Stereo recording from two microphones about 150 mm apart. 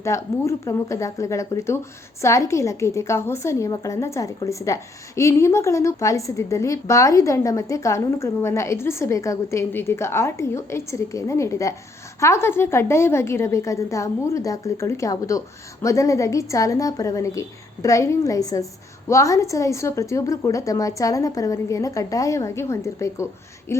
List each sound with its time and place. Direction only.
0.0 s a woman's voice: 20° left (ahead or behind)